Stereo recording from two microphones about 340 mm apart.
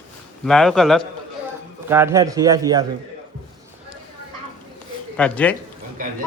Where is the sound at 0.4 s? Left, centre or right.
Centre.